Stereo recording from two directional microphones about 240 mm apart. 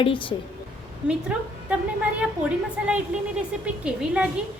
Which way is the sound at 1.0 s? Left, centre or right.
Centre.